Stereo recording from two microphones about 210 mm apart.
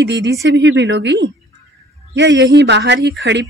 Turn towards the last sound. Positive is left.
turn(degrees=-60)  # may be behind; listen again after turning